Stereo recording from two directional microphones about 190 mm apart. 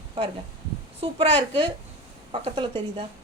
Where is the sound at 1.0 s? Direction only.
25° right (ahead or behind).